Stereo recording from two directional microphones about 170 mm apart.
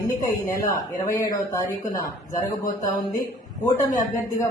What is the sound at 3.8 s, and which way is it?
Speech, 20° left (ahead or behind).